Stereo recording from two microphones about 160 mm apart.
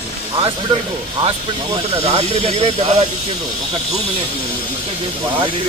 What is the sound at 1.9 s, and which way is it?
Speech, 40° right (ahead or behind).